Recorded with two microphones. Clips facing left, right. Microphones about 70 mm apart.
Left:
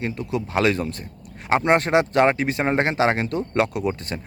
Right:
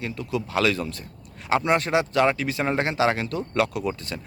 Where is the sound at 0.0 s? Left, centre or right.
Left.